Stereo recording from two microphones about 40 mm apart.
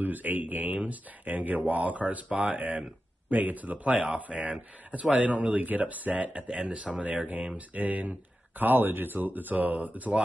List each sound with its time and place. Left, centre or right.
0.0 s speech: right
3.3 s speech: right
6.3 s speech: right